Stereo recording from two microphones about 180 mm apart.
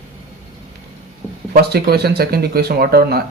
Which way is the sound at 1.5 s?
60° right (ahead or behind).